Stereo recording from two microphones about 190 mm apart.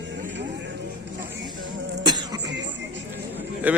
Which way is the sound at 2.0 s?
20° right (ahead or behind).